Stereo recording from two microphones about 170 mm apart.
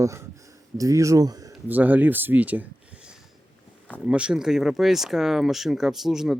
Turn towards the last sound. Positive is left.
turn(degrees=0)  # may be behind; listen again after turning